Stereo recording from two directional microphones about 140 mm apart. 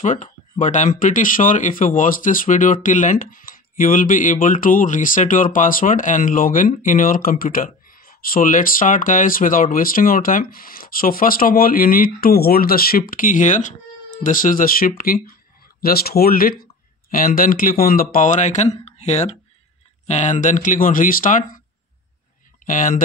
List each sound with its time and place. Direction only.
0.0 s speech: 60° left (ahead or behind); by 13.0 s 90° left
13.1 s speech: 70° left (ahead or behind); by 16.5 s 90° left
17.1 s speech: 80° left
22.7 s speech: 70° left (ahead or behind)